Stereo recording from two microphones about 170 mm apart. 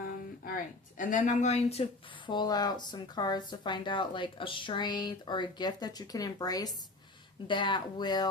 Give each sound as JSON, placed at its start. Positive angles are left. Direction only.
{"t": 0.4, "sound": "speech", "side_deg": 50}